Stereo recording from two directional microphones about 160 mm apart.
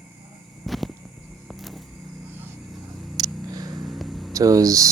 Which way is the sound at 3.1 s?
25° right (ahead or behind).